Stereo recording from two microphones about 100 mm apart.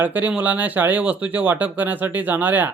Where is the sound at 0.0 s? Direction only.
15° right (ahead or behind).